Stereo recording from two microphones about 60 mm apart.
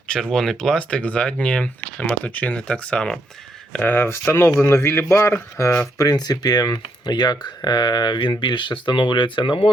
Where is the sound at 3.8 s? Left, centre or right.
Left.